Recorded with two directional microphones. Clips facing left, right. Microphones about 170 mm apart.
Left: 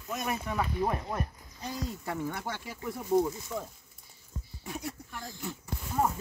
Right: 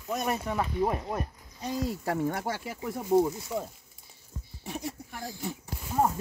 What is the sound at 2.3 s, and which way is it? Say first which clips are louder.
Speech: right 5 dB; 45° right (ahead or behind).